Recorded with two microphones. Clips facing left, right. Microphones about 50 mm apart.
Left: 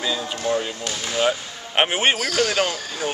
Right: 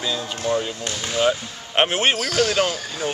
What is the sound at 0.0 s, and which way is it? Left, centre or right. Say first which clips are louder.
Speech: left 1 dB; centre.